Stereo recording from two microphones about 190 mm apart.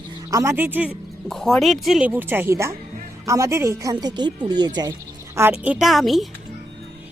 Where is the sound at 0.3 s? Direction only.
15° right (ahead or behind).